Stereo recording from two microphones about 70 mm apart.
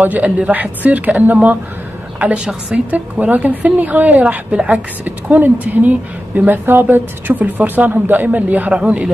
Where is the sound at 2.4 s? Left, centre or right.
Centre.